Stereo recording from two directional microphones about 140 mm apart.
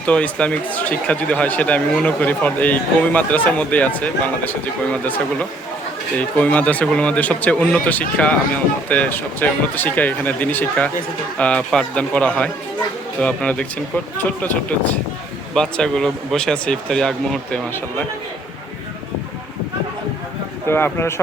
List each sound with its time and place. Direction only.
0.0 s speech: 10° left (ahead or behind)
20.7 s speech: 15° left (ahead or behind)